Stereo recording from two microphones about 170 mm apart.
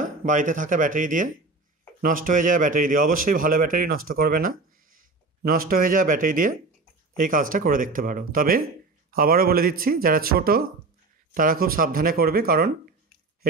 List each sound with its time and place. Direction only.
0.2 s speech: 50° right (ahead or behind)